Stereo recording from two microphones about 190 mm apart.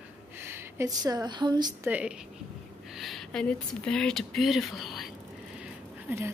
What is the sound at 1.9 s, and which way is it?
A woman's voice, 5° right (ahead or behind).